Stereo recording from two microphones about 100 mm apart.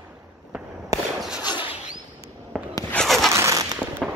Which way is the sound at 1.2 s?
10° right (ahead or behind).